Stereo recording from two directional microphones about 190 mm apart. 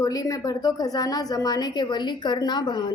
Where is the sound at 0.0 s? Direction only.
20° left (ahead or behind).